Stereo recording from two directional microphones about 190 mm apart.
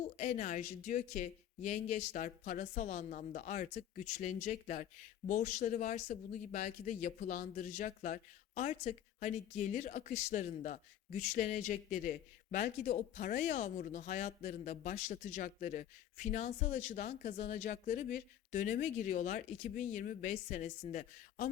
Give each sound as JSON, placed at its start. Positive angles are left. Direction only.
{"t": 0.0, "sound": "speech", "side_deg": 40}